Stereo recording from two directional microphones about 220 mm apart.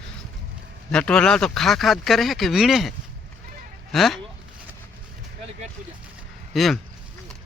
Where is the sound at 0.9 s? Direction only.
5° left (ahead or behind).